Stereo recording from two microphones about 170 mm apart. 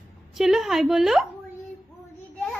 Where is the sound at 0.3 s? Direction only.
Centre (ahead or behind).